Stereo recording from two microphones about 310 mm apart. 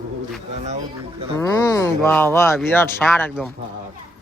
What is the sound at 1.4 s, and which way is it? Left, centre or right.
Speech, centre.